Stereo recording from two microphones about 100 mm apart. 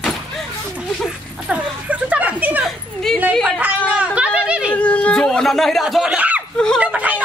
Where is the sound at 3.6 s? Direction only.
15° right (ahead or behind).